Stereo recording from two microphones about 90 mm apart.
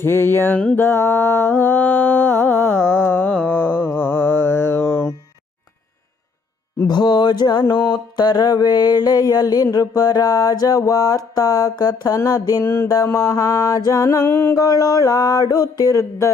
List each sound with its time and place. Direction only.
0.0 s music: 25° left (ahead or behind)
0.5 s music: 15° left (ahead or behind)
0.8 s music: 25° left (ahead or behind)
3.0 s mantra: 20° left (ahead or behind)
6.8 s mantra: 55° left (ahead or behind)
12.6 s music: 30° left (ahead or behind)
13.1 s mantra: 40° left (ahead or behind)
14.5 s mantra: 45° left (ahead or behind)